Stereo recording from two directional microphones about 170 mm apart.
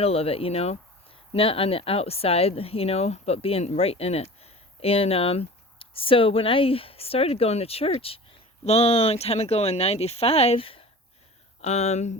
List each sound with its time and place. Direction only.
0.0 s speech: 35° left (ahead or behind)